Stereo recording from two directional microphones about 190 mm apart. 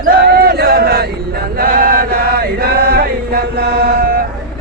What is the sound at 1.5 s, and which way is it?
Chant, 50° right (ahead or behind).